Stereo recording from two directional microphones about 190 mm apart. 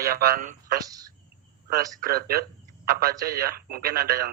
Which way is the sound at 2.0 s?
50° right (ahead or behind).